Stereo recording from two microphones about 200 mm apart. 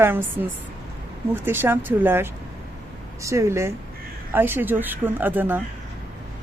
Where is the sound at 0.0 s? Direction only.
10° right (ahead or behind).